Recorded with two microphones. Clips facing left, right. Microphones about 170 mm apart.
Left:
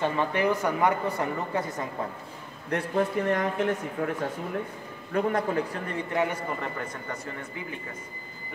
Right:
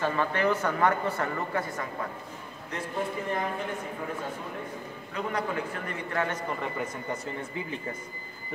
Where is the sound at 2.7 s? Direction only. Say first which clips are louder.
Left 6 dB; 65° left (ahead or behind).